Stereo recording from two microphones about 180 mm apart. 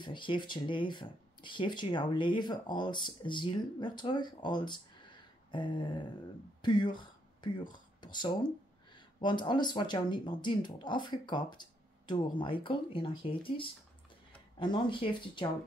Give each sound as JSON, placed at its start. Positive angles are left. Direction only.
{"t": 0.0, "sound": "speech", "side_deg": 25}